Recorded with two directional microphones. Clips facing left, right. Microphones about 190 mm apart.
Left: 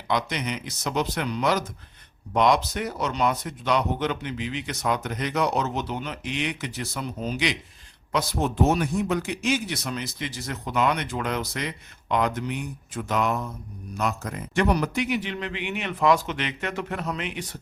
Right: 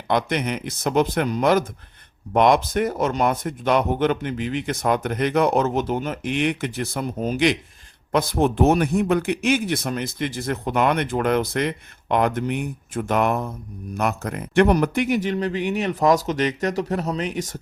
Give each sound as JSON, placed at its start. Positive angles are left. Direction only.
{"t": 0.1, "sound": "speech", "side_deg": -55}